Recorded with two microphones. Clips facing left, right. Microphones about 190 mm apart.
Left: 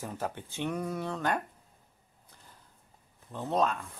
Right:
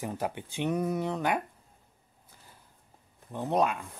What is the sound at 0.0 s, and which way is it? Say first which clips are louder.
Speech: right 3 dB; 15° right (ahead or behind).